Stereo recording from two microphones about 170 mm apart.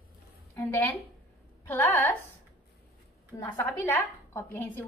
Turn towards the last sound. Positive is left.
turn(degrees=15)  # may be behind; listen again after turning